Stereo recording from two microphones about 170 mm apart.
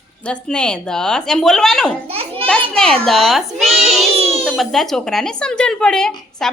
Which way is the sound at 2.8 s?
5° left (ahead or behind).